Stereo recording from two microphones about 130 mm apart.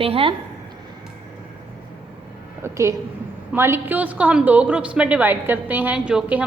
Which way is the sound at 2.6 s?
20° right (ahead or behind).